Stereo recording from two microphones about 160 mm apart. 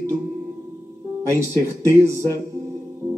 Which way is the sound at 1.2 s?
20° right (ahead or behind).